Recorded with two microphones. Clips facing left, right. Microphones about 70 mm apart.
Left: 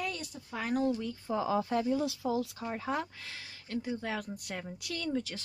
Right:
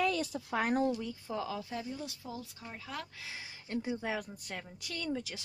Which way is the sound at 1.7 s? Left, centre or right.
Left.